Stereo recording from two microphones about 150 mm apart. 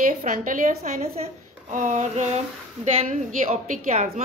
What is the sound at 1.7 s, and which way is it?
A woman's voice, 55° right (ahead or behind).